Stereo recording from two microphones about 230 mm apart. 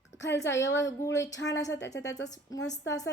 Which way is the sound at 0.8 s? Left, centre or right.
Centre.